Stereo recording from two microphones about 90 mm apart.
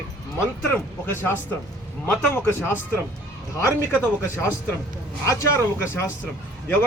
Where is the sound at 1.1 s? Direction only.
25° left (ahead or behind).